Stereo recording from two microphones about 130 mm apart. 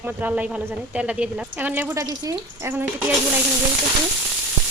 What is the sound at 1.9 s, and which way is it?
Speech, 25° right (ahead or behind).